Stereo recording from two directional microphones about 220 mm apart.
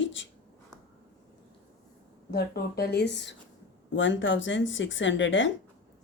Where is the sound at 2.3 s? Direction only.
45° left (ahead or behind).